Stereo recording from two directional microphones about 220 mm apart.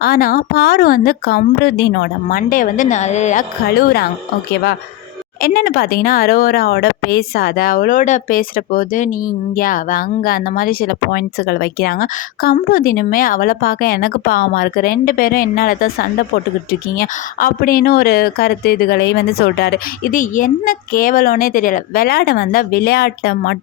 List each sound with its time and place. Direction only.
0.0 s speech: 45° left (ahead or behind)
3.8 s speech: 45° left (ahead or behind)
5.4 s speech: 45° left (ahead or behind)